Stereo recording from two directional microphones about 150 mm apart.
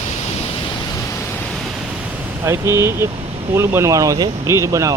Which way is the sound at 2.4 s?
20° right (ahead or behind).